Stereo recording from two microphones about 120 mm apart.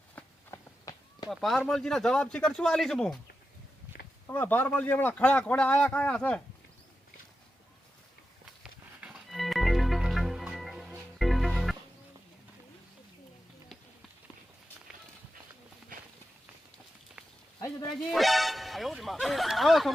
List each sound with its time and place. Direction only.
0.5 s run: 25° left (ahead or behind)
1.3 s speech: centre (ahead or behind)
4.3 s speech: 15° left (ahead or behind)
9.0 s music: 10° right (ahead or behind)
18.1 s music: centre (ahead or behind)